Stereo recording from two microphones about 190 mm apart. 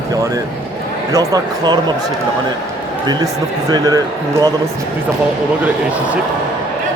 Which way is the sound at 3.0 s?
20° right (ahead or behind).